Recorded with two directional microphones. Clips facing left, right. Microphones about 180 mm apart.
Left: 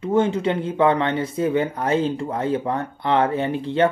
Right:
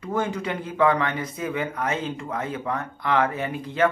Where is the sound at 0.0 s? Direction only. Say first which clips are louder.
Left 7 dB; 25° left (ahead or behind).